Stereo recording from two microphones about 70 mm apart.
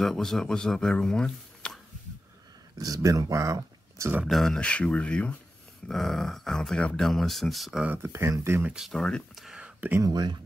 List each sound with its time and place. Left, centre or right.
0.0 s speech: centre
2.8 s speech: right
4.3 s speech: centre
4.6 s speech: centre
5.9 s speech: centre
8.0 s speech: right
8.9 s speech: centre
9.3 s speech: centre
9.8 s speech: right
10.0 s speech: right